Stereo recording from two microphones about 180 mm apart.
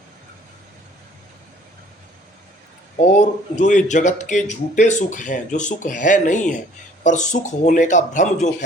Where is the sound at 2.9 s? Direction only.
40° left (ahead or behind).